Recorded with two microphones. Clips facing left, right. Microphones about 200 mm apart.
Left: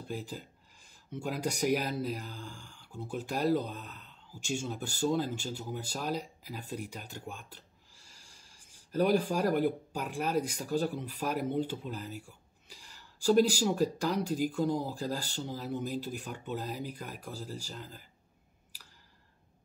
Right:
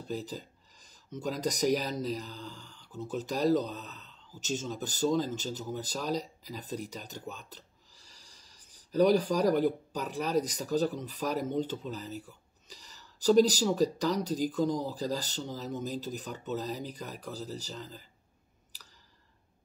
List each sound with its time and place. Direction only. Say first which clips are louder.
0.8 s speech: right 1 dB; 10° left (ahead or behind)
7.9 s a sound: right 1 dB; 40° right (ahead or behind)
8.9 s speech: right 3 dB; 10° left (ahead or behind)